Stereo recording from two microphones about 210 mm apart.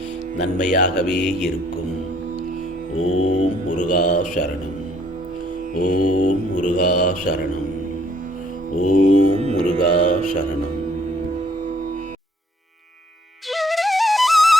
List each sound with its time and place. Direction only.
0.6 s mantra: 35° left (ahead or behind)
0.9 s music: 5° left (ahead or behind)
3.1 s mantra: 35° left (ahead or behind)
5.7 s mantra: 40° left (ahead or behind)
8.9 s mantra: 40° left (ahead or behind)
9.4 s music: 25° right (ahead or behind)
10.0 s mantra: 40° left (ahead or behind)
13.5 s music: centre (ahead or behind)